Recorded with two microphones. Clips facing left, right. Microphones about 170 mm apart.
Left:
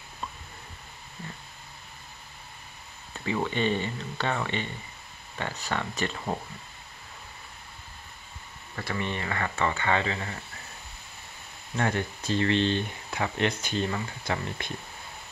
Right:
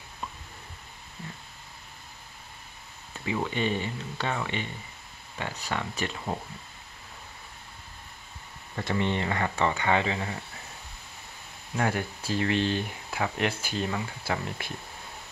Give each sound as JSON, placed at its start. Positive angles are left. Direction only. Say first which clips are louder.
{"t": 3.4, "sound": "speech", "louder": "left 3 dB", "side_deg": -10}
{"t": 8.7, "sound": "speech", "louder": "right 4 dB", "side_deg": -20}
{"t": 11.7, "sound": "speech", "louder": "even", "side_deg": -5}